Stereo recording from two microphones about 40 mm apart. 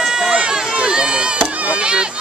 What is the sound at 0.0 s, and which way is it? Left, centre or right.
Run, centre.